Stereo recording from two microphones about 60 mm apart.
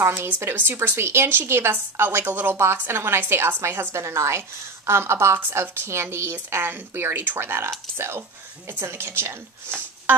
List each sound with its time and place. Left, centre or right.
0.0 s a woman's voice: right